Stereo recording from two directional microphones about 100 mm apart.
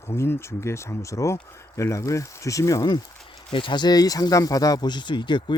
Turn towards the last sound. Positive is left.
turn(degrees=50)  # may be behind; listen again after turning